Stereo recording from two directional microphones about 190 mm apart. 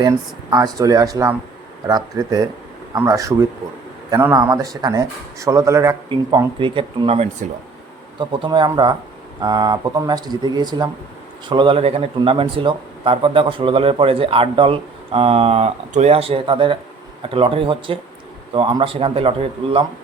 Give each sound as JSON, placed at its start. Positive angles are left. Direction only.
{"t": 0.5, "sound": "speech", "side_deg": -20}